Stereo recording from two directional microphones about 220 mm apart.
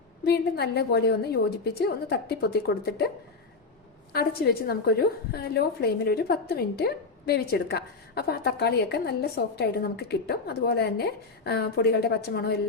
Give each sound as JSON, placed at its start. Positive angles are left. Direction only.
{"t": 0.3, "sound": "a woman's voice", "side_deg": 45}
{"t": 4.1, "sound": "a woman's voice", "side_deg": 45}